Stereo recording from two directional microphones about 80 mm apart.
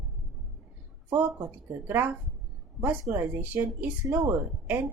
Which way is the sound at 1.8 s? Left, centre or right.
Right.